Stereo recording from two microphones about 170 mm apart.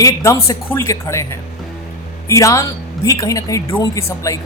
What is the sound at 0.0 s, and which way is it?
A woman's voice, 20° left (ahead or behind).